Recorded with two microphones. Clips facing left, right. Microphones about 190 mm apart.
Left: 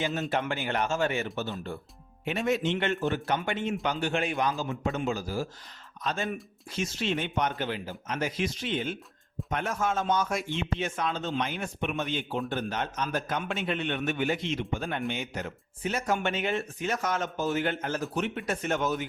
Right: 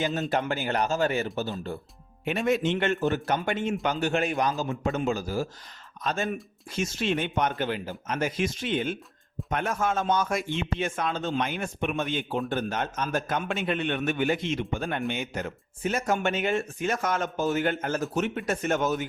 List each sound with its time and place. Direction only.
0.0 s speech: 40° right (ahead or behind)
2.2 s speech: 55° right (ahead or behind)